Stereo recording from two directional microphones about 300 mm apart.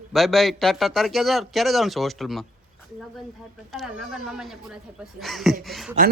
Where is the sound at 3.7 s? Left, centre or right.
Centre.